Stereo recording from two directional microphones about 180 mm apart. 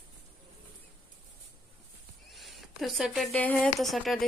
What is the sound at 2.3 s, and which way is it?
Speech, centre (ahead or behind).